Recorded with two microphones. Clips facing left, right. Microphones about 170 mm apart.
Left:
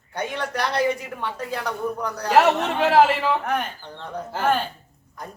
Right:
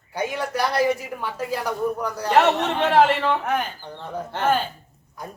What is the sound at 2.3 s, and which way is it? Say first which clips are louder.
Speech: left 1 dB; 5° left (ahead or behind).